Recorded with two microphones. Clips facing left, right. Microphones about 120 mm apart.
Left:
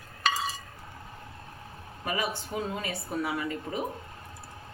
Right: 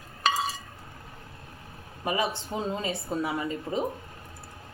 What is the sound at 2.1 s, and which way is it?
Speech, 25° right (ahead or behind).